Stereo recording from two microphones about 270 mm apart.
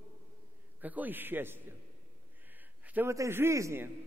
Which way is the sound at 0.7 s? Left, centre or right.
Centre.